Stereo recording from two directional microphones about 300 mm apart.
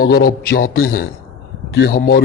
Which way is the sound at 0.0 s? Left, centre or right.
Left.